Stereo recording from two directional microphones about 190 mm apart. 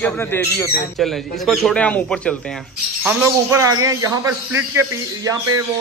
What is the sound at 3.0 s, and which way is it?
A man's voice, 10° right (ahead or behind).